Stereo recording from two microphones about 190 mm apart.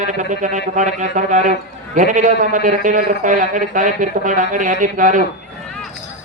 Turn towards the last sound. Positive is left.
turn(degrees=-45)  # may be behind; listen again after turning